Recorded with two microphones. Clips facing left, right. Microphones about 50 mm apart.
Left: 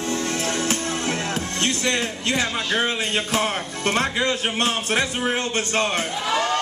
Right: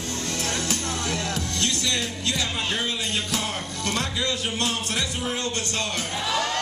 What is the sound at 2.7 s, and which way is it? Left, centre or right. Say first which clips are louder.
Speech: left 5 dB; left.